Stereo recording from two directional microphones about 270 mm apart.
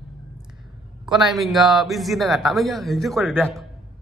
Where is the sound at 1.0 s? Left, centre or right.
Centre.